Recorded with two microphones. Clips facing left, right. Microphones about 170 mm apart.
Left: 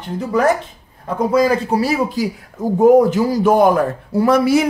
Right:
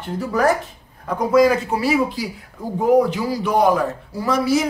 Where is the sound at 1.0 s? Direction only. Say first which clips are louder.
Even; 30° left (ahead or behind).